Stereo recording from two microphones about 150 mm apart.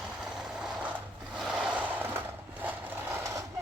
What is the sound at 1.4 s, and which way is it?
Vehicle, 5° right (ahead or behind).